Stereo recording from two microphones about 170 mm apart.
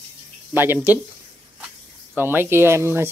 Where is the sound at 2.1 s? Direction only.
15° right (ahead or behind).